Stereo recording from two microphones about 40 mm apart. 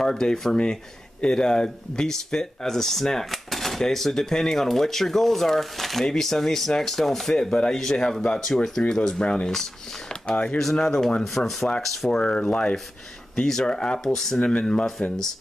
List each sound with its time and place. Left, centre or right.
0.0 s speech: centre
10.0 s a sound: left
10.6 s speech: centre
12.1 s speech: left
14.0 s speech: centre
14.4 s speech: left